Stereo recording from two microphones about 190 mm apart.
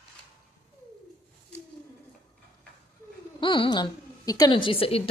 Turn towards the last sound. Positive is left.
turn(degrees=30)  # may be behind; listen again after turning